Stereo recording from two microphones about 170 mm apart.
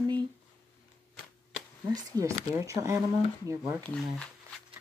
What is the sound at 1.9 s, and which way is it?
Speech, 20° right (ahead or behind).